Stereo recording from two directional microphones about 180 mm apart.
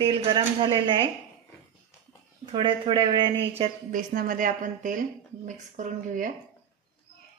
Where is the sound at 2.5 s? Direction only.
30° right (ahead or behind).